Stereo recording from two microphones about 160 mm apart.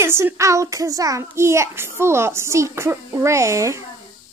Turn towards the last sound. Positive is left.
turn(degrees=-20)  # may be behind; listen again after turning